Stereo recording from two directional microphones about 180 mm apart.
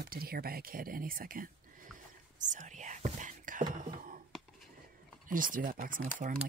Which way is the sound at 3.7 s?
45° right (ahead or behind).